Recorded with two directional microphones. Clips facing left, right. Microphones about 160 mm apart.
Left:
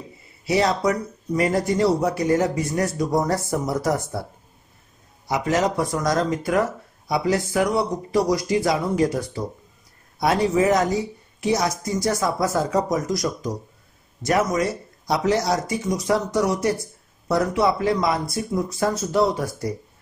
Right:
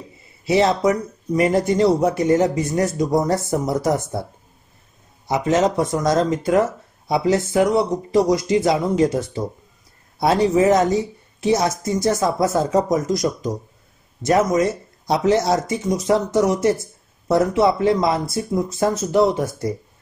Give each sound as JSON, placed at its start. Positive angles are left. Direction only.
{"t": 0.5, "sound": "speech", "side_deg": -25}
{"t": 5.3, "sound": "speech", "side_deg": -25}